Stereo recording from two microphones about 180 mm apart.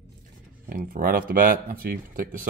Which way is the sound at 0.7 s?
50° right (ahead or behind).